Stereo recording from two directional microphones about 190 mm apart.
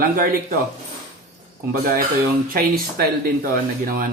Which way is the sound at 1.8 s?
50° right (ahead or behind).